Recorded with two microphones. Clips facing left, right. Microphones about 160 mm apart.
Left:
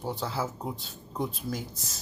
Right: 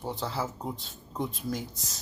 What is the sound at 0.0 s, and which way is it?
Speech, 5° left (ahead or behind).